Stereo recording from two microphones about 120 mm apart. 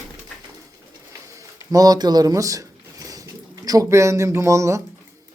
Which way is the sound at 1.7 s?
30° right (ahead or behind).